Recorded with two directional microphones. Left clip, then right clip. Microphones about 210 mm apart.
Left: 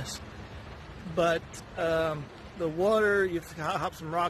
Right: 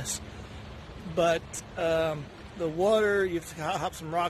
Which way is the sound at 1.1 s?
10° right (ahead or behind).